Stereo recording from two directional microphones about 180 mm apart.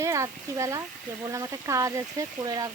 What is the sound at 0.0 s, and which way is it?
Speech, 15° right (ahead or behind).